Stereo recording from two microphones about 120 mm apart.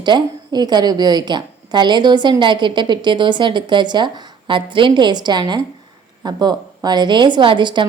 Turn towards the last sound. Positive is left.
turn(degrees=-40)  # may be behind; listen again after turning